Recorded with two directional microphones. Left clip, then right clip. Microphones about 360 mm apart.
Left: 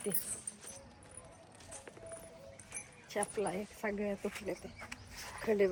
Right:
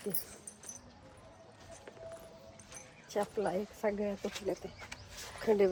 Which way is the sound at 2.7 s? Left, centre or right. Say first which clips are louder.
Right 3 dB; centre.